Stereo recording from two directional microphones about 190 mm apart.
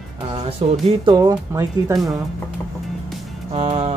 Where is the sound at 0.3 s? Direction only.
30° right (ahead or behind).